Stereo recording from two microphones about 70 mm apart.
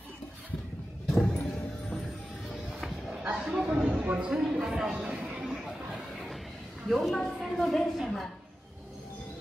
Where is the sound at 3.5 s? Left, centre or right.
Centre.